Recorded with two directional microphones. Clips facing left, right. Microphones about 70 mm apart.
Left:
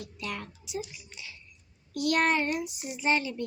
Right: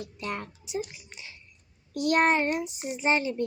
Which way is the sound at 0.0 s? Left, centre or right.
Right.